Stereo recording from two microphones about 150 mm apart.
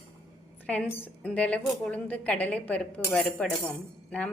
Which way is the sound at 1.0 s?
10° left (ahead or behind).